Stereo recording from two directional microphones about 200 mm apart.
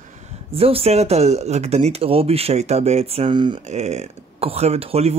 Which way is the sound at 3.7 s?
35° right (ahead or behind).